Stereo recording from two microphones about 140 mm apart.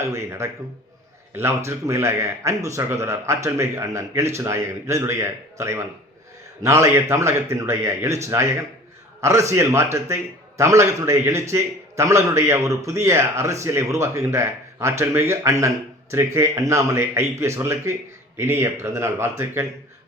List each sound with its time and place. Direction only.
0.0 s a man's voice: 20° right (ahead or behind)